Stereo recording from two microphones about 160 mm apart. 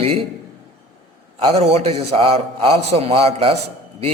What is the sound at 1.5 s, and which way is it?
A man's voice, 40° right (ahead or behind).